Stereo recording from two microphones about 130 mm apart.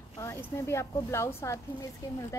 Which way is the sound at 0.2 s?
20° left (ahead or behind).